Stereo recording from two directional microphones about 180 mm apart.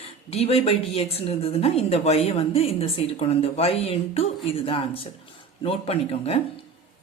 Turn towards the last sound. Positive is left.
turn(degrees=35)  # may be behind; listen again after turning